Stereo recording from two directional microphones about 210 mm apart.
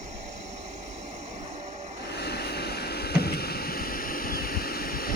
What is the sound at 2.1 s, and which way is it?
Vehicle, 50° left (ahead or behind).